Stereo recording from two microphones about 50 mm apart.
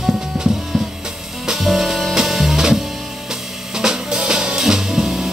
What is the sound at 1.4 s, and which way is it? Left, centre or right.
Music, centre.